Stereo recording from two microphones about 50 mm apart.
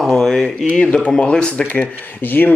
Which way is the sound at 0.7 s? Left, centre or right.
Left.